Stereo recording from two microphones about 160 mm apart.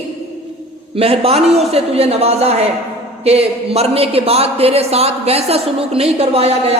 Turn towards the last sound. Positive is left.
turn(degrees=-40)  # may be behind; listen again after turning